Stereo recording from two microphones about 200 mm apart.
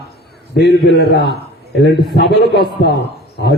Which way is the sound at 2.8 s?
55° left (ahead or behind).